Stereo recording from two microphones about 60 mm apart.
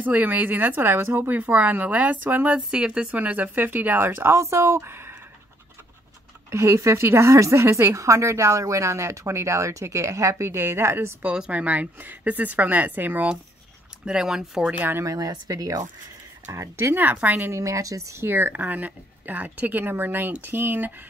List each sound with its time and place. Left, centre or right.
0.0 s speech: right
1.5 s speech: right
2.7 s speech: centre
3.1 s speech: right
6.5 s a woman's voice: right
11.3 s speech: centre
14.0 s speech: centre
14.6 s speech: right
15.0 s speech: right
16.4 s a woman's voice: right
16.9 s speech: right
17.4 s speech: right
18.2 s speech: right